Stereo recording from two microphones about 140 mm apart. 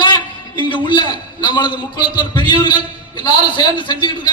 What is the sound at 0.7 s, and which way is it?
A man's voice, 35° left (ahead or behind).